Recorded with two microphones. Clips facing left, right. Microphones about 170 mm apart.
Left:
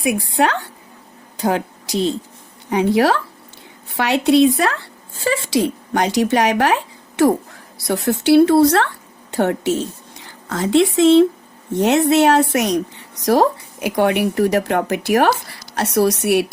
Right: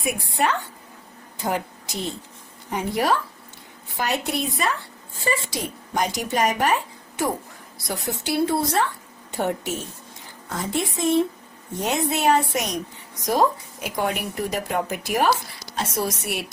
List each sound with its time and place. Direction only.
0.0 s speech: 90° left
2.6 s a woman's voice: 80° left
11.7 s speech: 70° left (ahead or behind)
13.8 s speech: 70° left (ahead or behind)